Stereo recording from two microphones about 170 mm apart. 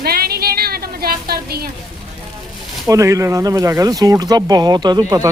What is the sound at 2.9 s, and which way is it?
Speech, 20° right (ahead or behind).